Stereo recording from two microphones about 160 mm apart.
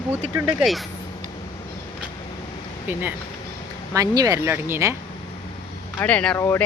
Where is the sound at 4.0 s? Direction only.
20° right (ahead or behind).